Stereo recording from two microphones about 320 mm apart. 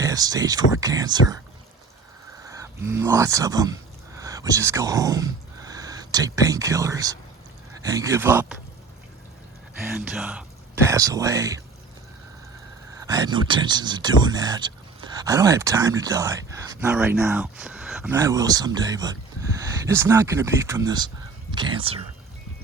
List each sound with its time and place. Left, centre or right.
0.0 s speech: centre
2.5 s speech: centre
9.8 s speech: centre
13.0 s speech: centre